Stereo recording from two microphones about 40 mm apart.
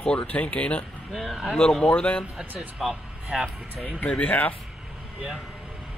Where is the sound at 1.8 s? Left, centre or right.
Left.